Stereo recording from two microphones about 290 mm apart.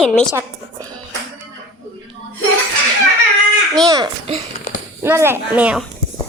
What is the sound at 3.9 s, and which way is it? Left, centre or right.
A child's voice, centre.